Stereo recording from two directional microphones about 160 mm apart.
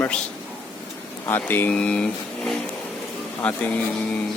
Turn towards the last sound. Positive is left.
turn(degrees=10)  # may be behind; listen again after turning